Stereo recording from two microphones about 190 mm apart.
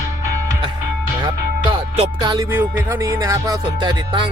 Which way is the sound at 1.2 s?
25° right (ahead or behind).